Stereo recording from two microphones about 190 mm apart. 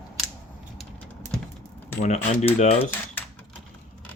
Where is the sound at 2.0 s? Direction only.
35° left (ahead or behind).